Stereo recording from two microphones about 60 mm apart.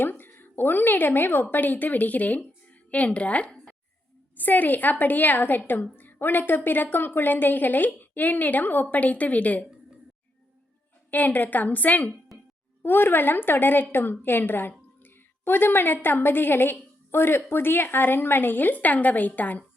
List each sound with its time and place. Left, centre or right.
0.0 s a woman's voice: left
11.1 s a woman's voice: left
12.8 s a woman's voice: left